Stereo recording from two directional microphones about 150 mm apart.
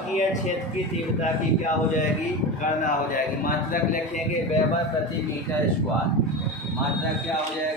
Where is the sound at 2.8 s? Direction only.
65° left (ahead or behind).